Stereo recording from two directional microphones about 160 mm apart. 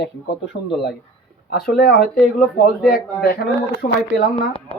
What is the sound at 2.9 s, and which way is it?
Speech, 70° left (ahead or behind).